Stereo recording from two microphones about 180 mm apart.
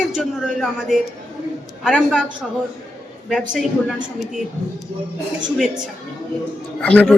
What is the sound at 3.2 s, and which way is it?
A woman's voice, centre (ahead or behind).